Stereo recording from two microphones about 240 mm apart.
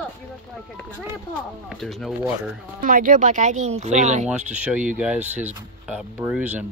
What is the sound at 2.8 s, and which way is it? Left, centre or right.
Speech, right.